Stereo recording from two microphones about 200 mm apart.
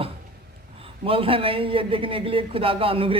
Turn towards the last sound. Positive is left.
turn(degrees=-25)  # may be behind; listen again after turning